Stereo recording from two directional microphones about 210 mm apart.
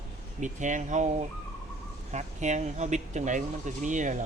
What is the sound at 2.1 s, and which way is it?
Speech, 35° right (ahead or behind).